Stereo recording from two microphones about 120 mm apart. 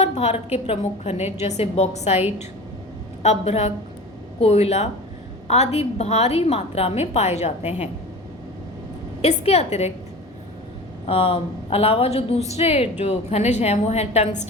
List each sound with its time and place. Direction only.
0.0 s a woman's voice: 65° left (ahead or behind)
3.2 s a woman's voice: 65° left (ahead or behind)
9.2 s a woman's voice: 60° left (ahead or behind)
11.0 s a woman's voice: 55° left (ahead or behind)